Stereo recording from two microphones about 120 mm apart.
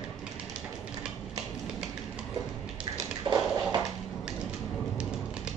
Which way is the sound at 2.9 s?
30° right (ahead or behind).